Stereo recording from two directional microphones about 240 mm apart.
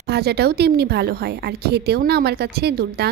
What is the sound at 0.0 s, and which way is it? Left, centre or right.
A woman's voice, right.